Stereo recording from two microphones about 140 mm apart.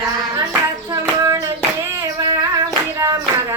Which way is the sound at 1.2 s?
25° right (ahead or behind).